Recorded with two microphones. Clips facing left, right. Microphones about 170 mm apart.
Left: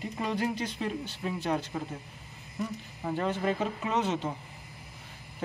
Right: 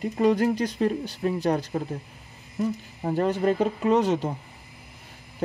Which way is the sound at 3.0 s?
40° right (ahead or behind).